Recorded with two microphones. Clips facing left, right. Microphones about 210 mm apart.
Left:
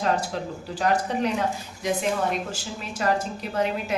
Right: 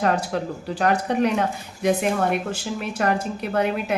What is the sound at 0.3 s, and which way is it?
A woman's voice, 60° right (ahead or behind).